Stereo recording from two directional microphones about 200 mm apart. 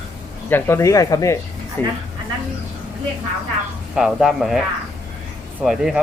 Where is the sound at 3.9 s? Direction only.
5° right (ahead or behind).